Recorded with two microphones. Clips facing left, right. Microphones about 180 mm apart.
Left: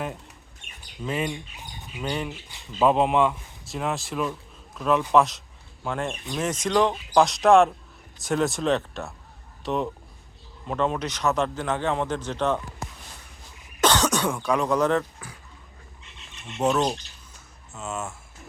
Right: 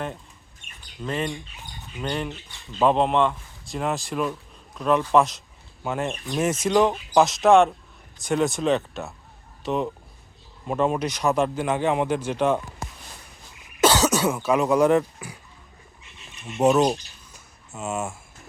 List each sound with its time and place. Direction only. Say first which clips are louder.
1.0 s a man's voice: even; 5° left (ahead or behind); by 12.6 s 10° right (ahead or behind)
13.8 s speech: right 3 dB; 5° right (ahead or behind)
16.3 s squawk: right 5 dB; 10° right (ahead or behind)
17.7 s a man's voice: right 4 dB; 10° right (ahead or behind)